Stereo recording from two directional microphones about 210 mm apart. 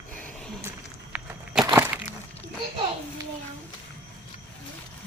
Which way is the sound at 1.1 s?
10° right (ahead or behind).